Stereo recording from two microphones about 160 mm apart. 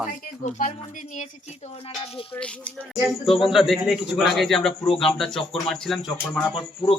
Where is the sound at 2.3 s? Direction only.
5° left (ahead or behind).